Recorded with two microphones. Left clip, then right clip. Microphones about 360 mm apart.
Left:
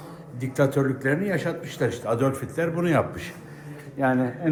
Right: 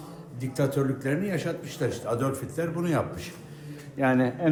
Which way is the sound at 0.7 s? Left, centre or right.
Centre.